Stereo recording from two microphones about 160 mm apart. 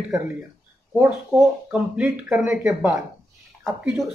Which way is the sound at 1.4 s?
5° right (ahead or behind).